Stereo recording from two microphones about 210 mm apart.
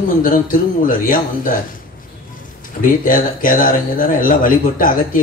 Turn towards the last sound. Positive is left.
turn(degrees=40)  # may be behind; listen again after turning